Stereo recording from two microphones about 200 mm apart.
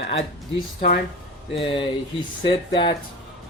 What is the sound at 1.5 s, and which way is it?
Speech, 25° left (ahead or behind).